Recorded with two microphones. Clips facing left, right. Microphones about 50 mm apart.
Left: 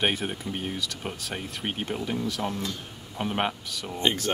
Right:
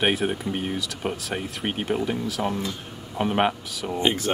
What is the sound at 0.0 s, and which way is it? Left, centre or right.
Speech, centre.